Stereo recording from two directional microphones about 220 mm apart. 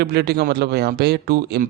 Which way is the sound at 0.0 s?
45° right (ahead or behind).